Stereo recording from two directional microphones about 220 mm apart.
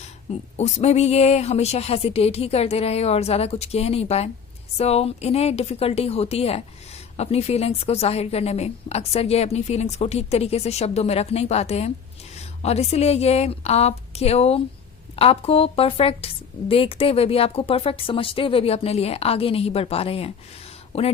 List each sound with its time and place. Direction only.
0.5 s a woman's voice: 30° left (ahead or behind)